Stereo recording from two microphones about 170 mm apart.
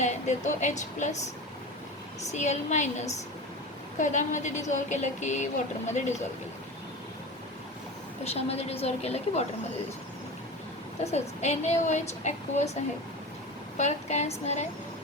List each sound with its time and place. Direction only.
0.0 s a woman's voice: 45° left (ahead or behind)
2.3 s a woman's voice: 45° left (ahead or behind)
8.2 s a woman's voice: 35° left (ahead or behind)
11.0 s a woman's voice: 40° left (ahead or behind)